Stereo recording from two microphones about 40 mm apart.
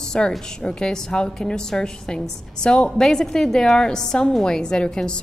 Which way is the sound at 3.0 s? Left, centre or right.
Centre.